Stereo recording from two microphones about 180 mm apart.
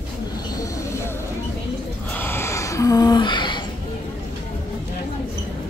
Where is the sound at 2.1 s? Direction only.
10° left (ahead or behind).